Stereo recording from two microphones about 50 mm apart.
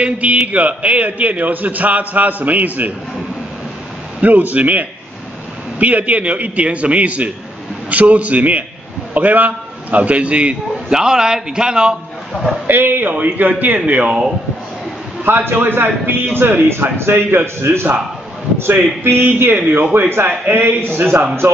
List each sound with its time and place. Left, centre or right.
0.0 s a man's voice: right
4.2 s a man's voice: right
10.9 s a man's voice: centre
12.6 s speech: right
13.1 s a man's voice: right
15.2 s speech: right
19.0 s speech: right
20.1 s speech: right